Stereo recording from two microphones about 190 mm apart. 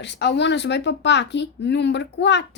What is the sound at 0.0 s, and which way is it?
A child's voice, 65° left (ahead or behind).